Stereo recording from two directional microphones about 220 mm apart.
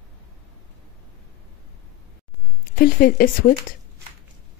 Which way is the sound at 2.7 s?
45° left (ahead or behind).